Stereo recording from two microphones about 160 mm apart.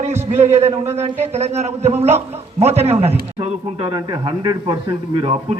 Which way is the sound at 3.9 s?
25° right (ahead or behind).